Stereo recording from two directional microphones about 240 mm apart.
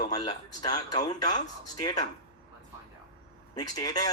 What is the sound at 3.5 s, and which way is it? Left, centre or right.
Speech, centre.